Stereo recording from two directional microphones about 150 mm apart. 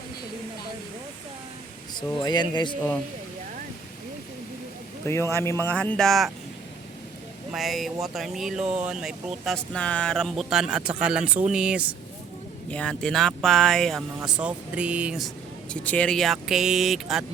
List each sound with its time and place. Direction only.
2.1 s speech: 30° left (ahead or behind)
5.0 s speech: 20° left (ahead or behind); by 6.3 s centre (ahead or behind)
7.5 s speech: centre (ahead or behind)
12.7 s speech: 5° left (ahead or behind)
15.7 s speech: 10° left (ahead or behind)